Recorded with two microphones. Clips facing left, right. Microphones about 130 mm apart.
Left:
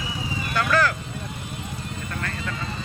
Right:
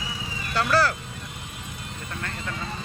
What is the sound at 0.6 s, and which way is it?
Vehicle, 30° right (ahead or behind).